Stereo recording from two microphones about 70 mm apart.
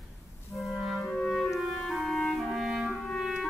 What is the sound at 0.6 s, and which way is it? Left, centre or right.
Clarinet, centre.